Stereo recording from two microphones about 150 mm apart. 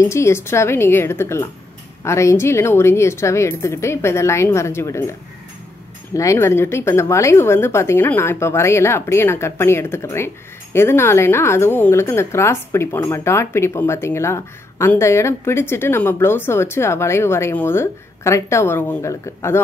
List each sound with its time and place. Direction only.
0.0 s a woman's voice: 20° left (ahead or behind)
6.1 s a woman's voice: 20° left (ahead or behind)